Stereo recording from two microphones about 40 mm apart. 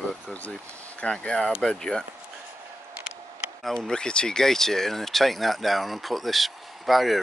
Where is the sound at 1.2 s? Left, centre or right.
Left.